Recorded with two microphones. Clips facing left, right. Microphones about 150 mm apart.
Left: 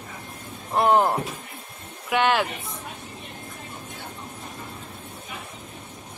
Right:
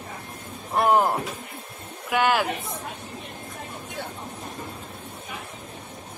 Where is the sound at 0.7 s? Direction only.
Centre (ahead or behind).